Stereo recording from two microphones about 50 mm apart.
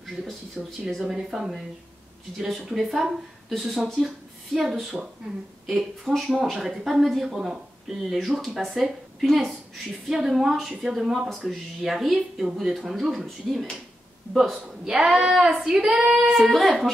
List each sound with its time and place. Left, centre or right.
0.6 s a woman's voice: centre
1.0 s female singing: centre
2.3 s a woman's voice: centre
4.9 s speech: right
5.7 s a woman's voice: centre
14.9 s speech: centre
15.1 s female singing: centre
16.5 s a woman's voice: centre